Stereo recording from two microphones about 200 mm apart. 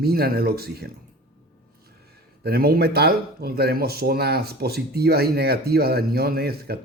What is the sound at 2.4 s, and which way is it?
Speech, 50° right (ahead or behind).